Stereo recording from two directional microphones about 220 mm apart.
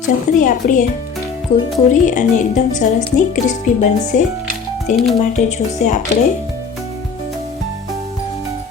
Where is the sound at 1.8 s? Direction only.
35° left (ahead or behind).